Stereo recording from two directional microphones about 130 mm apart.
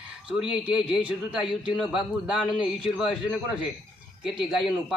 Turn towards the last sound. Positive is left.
turn(degrees=-5)  # may be behind; listen again after turning